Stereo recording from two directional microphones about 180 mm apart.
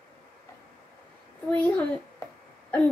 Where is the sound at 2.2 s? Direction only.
20° left (ahead or behind).